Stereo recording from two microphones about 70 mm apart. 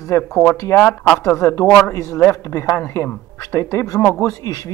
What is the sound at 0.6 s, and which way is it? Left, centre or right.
Speech, left.